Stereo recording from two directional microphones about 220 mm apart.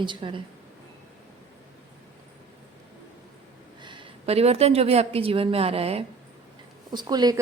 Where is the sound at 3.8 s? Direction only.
20° right (ahead or behind).